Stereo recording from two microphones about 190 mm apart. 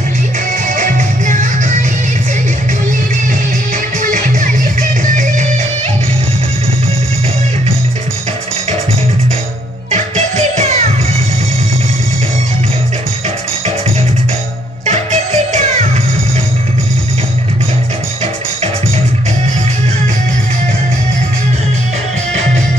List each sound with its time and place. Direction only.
0.7 s music: 40° right (ahead or behind)
4.0 s music: 45° right (ahead or behind)
9.8 s music: 35° right (ahead or behind)
14.9 s music: 35° right (ahead or behind)